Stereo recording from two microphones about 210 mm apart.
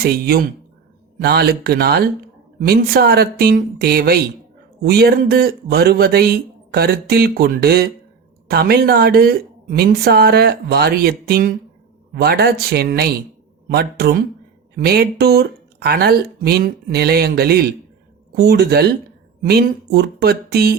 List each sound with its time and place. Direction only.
0.0 s a man's voice: 45° right (ahead or behind)